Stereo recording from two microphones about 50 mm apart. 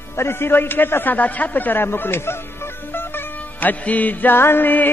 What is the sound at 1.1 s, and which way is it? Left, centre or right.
Speech, left.